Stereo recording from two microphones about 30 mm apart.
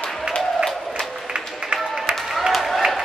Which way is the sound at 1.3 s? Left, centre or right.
Right.